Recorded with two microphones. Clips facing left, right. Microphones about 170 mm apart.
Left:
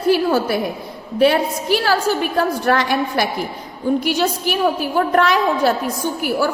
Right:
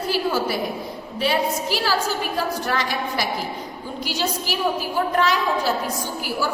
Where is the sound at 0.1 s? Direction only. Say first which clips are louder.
Left 7 dB; 55° left (ahead or behind).